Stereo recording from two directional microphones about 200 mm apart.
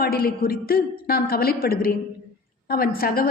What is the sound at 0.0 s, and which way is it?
A woman's voice, 50° left (ahead or behind).